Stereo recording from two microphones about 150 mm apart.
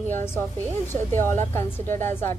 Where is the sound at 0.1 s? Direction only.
15° left (ahead or behind).